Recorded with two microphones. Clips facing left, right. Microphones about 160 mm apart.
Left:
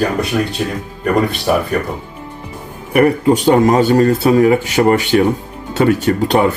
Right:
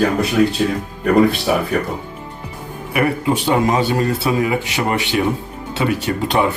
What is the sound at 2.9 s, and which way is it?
Speech, 45° left (ahead or behind).